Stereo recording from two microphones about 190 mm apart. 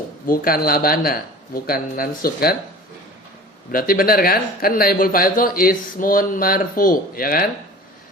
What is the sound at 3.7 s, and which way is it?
Speech, 50° left (ahead or behind).